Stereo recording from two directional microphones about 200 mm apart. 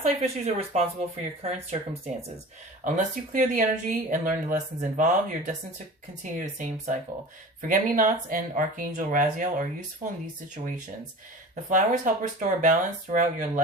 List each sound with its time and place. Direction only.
0.0 s speech: 30° right (ahead or behind)
11.7 s speech: 40° right (ahead or behind)